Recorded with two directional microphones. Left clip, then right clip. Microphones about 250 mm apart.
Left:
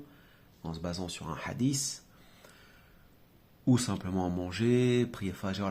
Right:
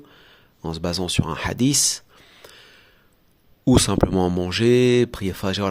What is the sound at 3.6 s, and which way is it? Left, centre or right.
Speech, right.